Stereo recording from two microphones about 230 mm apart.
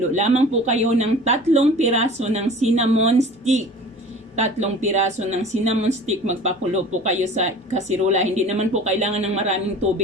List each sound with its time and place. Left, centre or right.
0.1 s a woman's voice: right